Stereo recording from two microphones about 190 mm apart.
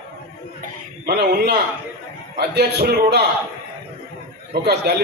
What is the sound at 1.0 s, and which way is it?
A man's voice, 60° right (ahead or behind).